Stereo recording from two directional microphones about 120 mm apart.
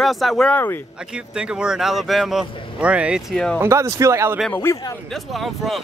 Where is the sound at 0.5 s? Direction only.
15° left (ahead or behind).